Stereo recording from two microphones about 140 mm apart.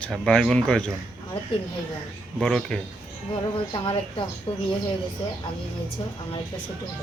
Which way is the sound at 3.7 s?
30° left (ahead or behind).